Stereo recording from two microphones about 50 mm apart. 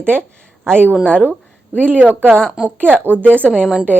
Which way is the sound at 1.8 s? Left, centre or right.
Right.